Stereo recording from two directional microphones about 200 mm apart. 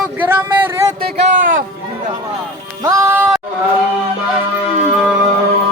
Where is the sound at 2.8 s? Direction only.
15° right (ahead or behind).